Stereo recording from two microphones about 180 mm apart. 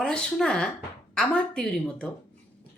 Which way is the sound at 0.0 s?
5° left (ahead or behind).